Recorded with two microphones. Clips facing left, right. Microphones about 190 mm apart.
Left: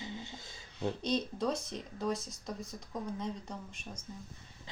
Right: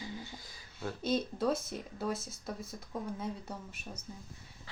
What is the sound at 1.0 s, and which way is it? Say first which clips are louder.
Speech: right 4 dB; 5° right (ahead or behind).